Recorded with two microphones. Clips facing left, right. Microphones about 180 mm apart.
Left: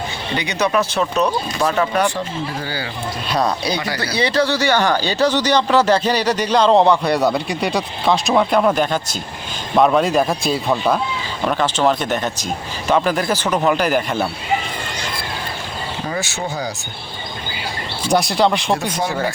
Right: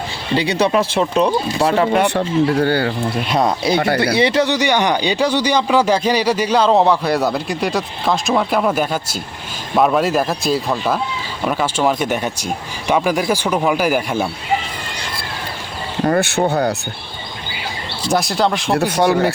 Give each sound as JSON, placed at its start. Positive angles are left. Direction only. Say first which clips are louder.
{"t": 0.3, "sound": "speech", "louder": "right 3 dB", "side_deg": -30}
{"t": 2.0, "sound": "speech", "louder": "right 7 dB", "side_deg": -65}
{"t": 3.2, "sound": "speech", "louder": "right 1 dB", "side_deg": -25}
{"t": 3.8, "sound": "speech", "louder": "right 7 dB", "side_deg": -55}
{"t": 4.0, "sound": "speech", "louder": "right 3 dB", "side_deg": -25}
{"t": 16.0, "sound": "speech", "louder": "right 11 dB", "side_deg": -60}
{"t": 18.1, "sound": "speech", "louder": "left 1 dB", "side_deg": 0}
{"t": 18.8, "sound": "speech", "louder": "right 7 dB", "side_deg": -65}